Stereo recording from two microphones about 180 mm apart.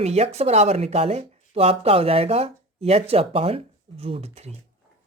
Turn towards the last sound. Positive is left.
turn(degrees=-35)  # may be behind; listen again after turning